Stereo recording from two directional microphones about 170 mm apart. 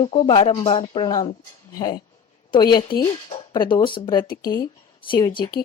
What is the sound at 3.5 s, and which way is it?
Speech, 30° left (ahead or behind).